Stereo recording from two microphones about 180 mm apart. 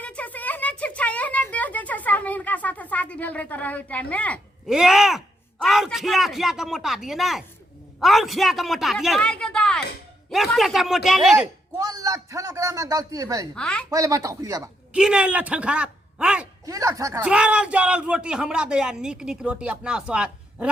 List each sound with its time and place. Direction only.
0.0 s a sound: 5° left (ahead or behind)
4.7 s a man's voice: 5° right (ahead or behind)
11.8 s a man's voice: 20° right (ahead or behind)
13.6 s speech: 5° left (ahead or behind)
13.9 s speech: 20° right (ahead or behind)
14.9 s a man's voice: 5° right (ahead or behind)
16.6 s speech: 20° right (ahead or behind)
17.2 s speech: 5° right (ahead or behind)